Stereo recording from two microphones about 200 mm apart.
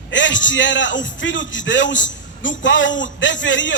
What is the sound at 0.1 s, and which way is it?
A man's voice, 65° left (ahead or behind).